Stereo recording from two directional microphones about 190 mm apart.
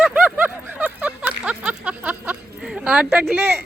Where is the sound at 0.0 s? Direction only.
5° right (ahead or behind).